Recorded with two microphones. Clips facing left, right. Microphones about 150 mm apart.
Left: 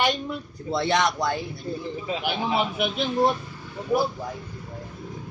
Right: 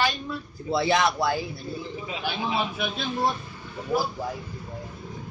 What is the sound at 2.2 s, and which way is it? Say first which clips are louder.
Speech: left 2 dB; 15° left (ahead or behind).